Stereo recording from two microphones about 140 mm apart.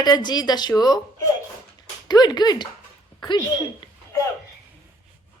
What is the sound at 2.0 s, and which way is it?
Speech, 30° left (ahead or behind).